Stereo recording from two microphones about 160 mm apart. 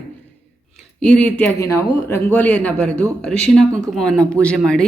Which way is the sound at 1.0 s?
5° left (ahead or behind).